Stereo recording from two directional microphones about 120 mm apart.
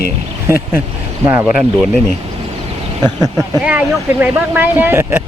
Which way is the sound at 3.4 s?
10° right (ahead or behind).